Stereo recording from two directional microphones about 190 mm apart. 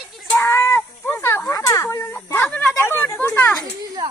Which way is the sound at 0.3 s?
10° left (ahead or behind).